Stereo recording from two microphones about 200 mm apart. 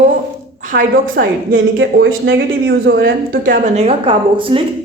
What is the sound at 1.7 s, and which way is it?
A woman's voice, 60° right (ahead or behind).